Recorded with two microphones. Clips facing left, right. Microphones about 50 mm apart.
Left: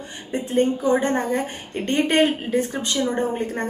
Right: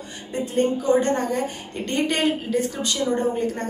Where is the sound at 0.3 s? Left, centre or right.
Left.